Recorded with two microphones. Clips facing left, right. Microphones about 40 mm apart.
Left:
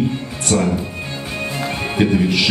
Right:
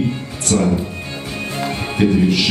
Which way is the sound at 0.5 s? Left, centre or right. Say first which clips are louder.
Right 1 dB; centre.